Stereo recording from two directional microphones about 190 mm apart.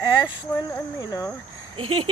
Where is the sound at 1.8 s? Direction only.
30° right (ahead or behind).